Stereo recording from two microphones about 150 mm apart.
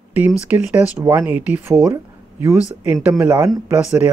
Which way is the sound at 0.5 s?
10° right (ahead or behind).